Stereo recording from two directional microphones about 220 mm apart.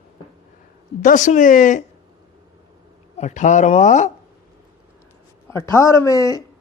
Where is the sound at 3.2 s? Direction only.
35° left (ahead or behind).